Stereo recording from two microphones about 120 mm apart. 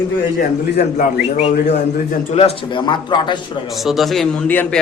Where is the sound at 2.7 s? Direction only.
40° left (ahead or behind).